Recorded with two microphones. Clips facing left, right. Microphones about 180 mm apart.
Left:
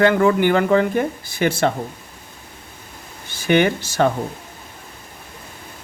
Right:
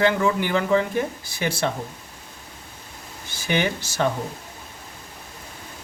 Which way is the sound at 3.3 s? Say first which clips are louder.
Left 7 dB; 55° left (ahead or behind).